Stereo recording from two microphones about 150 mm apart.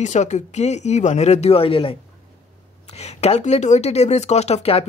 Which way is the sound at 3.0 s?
45° left (ahead or behind).